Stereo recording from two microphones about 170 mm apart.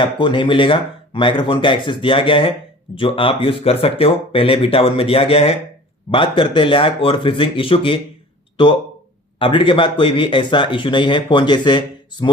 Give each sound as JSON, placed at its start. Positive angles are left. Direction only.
{"t": 0.0, "sound": "speech", "side_deg": 30}
{"t": 9.4, "sound": "speech", "side_deg": 30}